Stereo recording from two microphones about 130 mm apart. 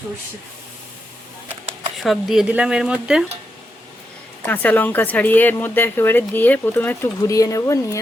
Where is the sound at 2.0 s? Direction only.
Centre (ahead or behind).